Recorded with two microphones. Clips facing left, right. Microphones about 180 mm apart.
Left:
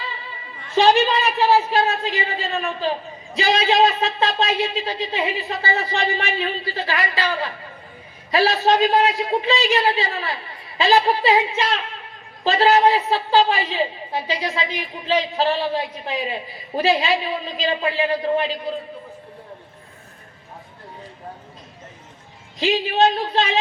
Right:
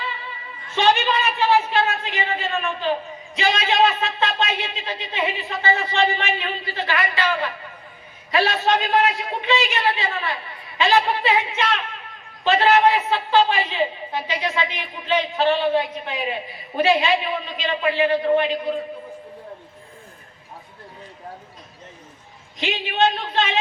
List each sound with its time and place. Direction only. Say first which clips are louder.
0.8 s a woman's voice: left 3 dB; 35° left (ahead or behind)
22.6 s a woman's voice: left 3 dB; 35° left (ahead or behind)